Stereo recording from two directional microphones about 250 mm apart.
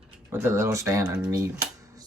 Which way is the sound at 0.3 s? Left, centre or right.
Centre.